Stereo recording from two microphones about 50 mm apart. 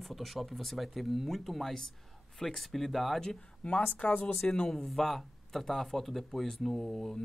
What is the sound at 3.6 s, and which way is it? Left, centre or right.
Speech, left.